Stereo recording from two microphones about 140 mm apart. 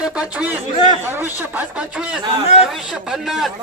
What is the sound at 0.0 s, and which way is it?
Speech, 5° right (ahead or behind).